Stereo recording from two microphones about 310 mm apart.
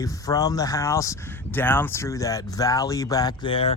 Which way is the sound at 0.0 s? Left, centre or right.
Centre.